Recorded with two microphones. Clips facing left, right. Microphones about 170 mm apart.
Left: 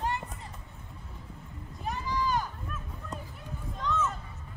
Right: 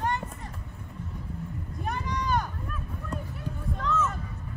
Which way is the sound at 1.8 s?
65° right (ahead or behind).